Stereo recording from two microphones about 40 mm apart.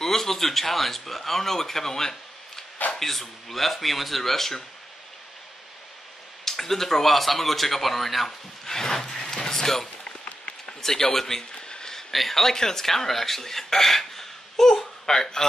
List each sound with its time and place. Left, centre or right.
0.0 s speech: centre
6.4 s speech: centre
8.6 s a sound: centre
10.7 s speech: centre
11.5 s a sound: left
12.1 s speech: centre